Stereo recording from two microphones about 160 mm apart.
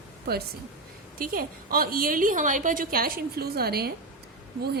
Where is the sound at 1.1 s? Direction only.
65° right (ahead or behind).